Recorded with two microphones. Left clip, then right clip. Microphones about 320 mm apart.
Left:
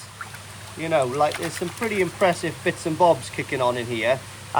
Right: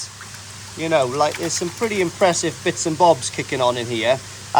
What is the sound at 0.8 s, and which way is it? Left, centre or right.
Speech, centre.